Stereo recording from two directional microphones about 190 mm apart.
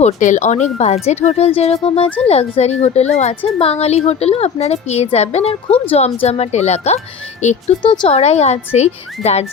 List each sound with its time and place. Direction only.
0.0 s a woman's voice: 40° left (ahead or behind)